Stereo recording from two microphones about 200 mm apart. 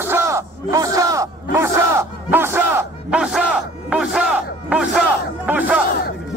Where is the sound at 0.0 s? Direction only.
15° right (ahead or behind).